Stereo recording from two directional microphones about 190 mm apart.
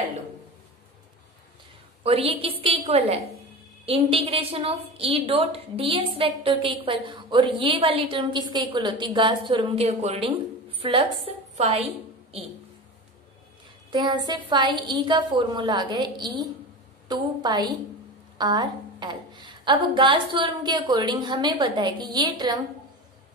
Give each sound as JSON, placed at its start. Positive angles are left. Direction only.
{"t": 2.0, "sound": "a woman's voice", "side_deg": -30}
{"t": 13.8, "sound": "a woman's voice", "side_deg": -20}